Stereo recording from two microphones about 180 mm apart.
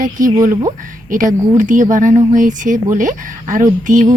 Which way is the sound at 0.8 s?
50° right (ahead or behind).